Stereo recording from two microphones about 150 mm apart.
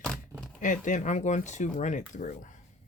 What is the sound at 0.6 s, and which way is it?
Speech, 60° left (ahead or behind).